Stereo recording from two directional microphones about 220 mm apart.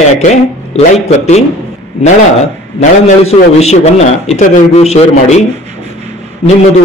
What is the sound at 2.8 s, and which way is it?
A man's voice, 30° left (ahead or behind).